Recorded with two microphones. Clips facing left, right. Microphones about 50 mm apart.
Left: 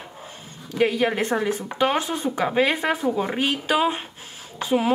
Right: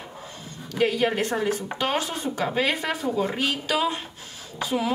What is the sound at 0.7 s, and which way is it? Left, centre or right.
A woman's voice, left.